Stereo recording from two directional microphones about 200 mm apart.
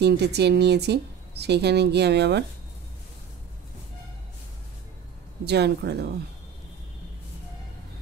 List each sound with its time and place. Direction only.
0.0 s speech: 55° right (ahead or behind)
5.4 s speech: 55° right (ahead or behind)